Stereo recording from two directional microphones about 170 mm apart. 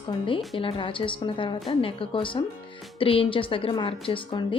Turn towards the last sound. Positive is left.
turn(degrees=30)  # may be behind; listen again after turning